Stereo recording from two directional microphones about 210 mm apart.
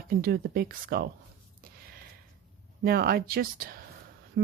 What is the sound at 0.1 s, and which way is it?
Speech, 45° right (ahead or behind).